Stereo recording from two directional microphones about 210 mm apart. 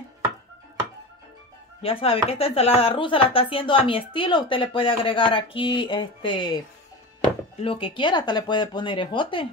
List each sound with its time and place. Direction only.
1.8 s speech: 25° left (ahead or behind)
7.6 s speech: 25° left (ahead or behind)